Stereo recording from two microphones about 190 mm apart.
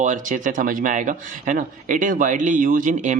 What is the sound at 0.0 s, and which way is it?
A man's voice, 40° right (ahead or behind).